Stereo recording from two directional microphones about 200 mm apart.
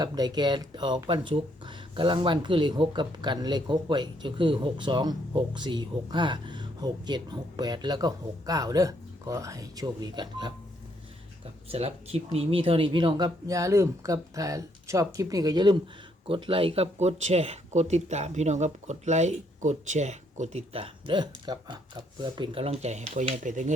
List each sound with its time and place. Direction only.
0.0 s speech: 20° right (ahead or behind)
11.7 s speech: 30° right (ahead or behind)